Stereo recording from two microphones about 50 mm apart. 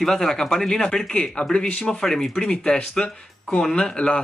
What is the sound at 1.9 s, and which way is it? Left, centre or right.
Speech, centre.